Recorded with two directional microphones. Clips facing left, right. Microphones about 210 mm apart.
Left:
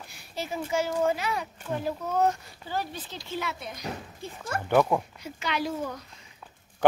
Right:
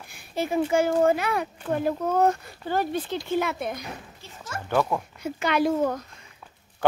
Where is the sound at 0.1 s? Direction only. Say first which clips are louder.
Right 8 dB; 55° right (ahead or behind).